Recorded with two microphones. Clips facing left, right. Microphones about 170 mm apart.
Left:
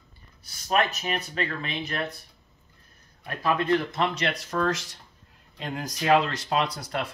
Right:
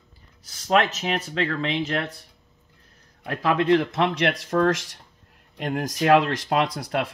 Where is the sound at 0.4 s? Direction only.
90° right.